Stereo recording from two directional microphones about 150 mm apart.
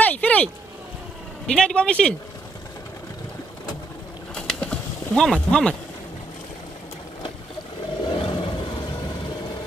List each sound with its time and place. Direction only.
0.0 s boat: 10° left (ahead or behind)
1.5 s speech: 5° left (ahead or behind)
4.4 s a sound: 5° left (ahead or behind)
8.0 s roar: 35° left (ahead or behind)